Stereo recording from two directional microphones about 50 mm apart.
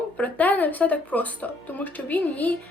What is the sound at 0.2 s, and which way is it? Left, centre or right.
A woman's voice, left.